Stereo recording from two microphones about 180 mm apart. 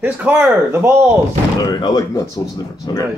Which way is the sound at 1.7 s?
25° left (ahead or behind).